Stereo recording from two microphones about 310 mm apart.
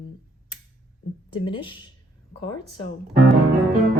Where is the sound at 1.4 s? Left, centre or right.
Centre.